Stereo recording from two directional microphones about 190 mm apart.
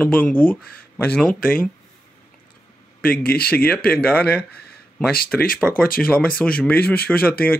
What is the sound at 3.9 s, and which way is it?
Speech, 10° left (ahead or behind).